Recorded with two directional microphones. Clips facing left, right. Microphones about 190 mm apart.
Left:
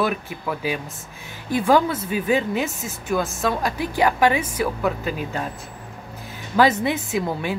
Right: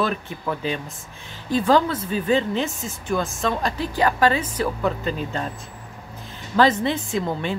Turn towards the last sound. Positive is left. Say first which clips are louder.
# even
turn(degrees=5)  # may be behind; listen again after turning